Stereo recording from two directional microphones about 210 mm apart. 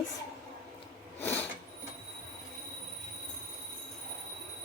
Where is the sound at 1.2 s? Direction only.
10° left (ahead or behind).